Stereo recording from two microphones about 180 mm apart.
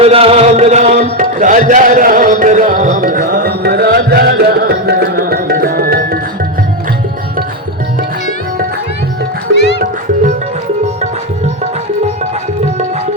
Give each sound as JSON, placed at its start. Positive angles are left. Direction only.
{"t": 0.0, "sound": "music", "side_deg": -35}